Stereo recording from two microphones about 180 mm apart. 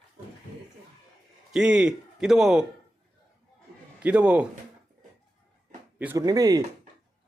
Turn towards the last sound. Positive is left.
turn(degrees=-20)  # may be behind; listen again after turning